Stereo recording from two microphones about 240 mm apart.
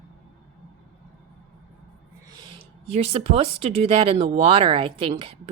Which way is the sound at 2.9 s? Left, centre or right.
Right.